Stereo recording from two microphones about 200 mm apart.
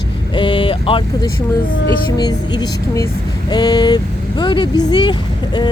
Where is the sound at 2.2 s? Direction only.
20° left (ahead or behind).